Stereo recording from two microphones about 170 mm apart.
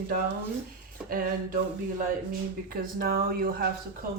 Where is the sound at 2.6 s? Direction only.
60° right (ahead or behind).